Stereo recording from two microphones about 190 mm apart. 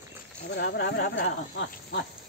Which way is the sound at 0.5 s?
60° left (ahead or behind).